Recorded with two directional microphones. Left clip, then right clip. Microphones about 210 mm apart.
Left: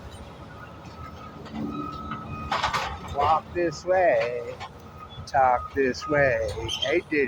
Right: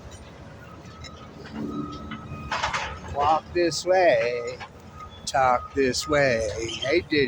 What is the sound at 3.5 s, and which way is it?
Speech, 20° right (ahead or behind).